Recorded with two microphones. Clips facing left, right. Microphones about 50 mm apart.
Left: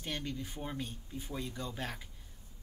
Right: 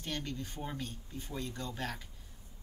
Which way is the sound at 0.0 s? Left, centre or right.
Centre.